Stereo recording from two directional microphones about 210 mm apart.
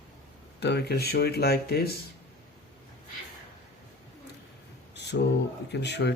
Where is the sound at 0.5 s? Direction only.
50° left (ahead or behind).